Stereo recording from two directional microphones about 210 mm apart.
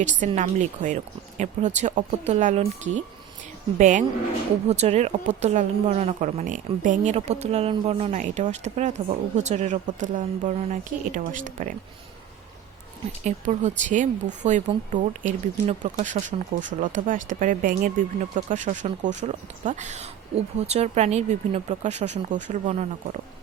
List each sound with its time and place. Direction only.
0.0 s speech: 35° right (ahead or behind)
13.2 s speech: 35° right (ahead or behind)